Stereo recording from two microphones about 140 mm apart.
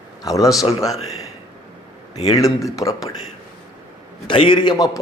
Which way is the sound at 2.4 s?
25° left (ahead or behind).